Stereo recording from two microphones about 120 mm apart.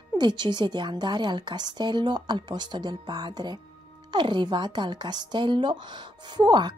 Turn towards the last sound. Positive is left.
turn(degrees=-40)  # may be behind; listen again after turning